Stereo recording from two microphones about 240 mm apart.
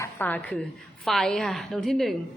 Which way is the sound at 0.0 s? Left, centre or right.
Centre.